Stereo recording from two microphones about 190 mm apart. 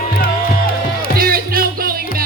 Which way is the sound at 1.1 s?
50° right (ahead or behind).